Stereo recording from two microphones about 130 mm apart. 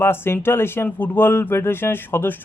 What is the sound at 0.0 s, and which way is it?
Speech, 15° left (ahead or behind).